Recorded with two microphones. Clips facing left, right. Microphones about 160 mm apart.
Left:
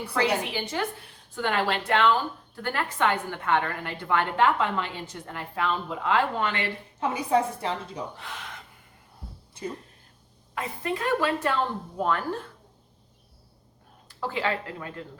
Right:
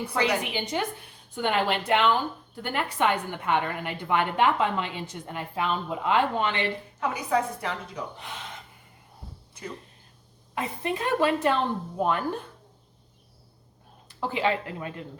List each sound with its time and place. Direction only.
0.5 s a woman's voice: 20° right (ahead or behind)
7.0 s a woman's voice: 30° left (ahead or behind)
10.5 s a woman's voice: 20° right (ahead or behind)
14.2 s a woman's voice: 20° right (ahead or behind)